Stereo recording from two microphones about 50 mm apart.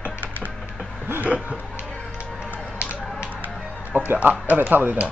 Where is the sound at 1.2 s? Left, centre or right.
Right.